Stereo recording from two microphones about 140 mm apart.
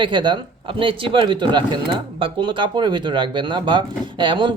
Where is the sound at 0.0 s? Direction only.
35° right (ahead or behind).